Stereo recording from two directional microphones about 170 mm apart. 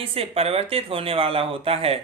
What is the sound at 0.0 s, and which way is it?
Speech, 35° right (ahead or behind).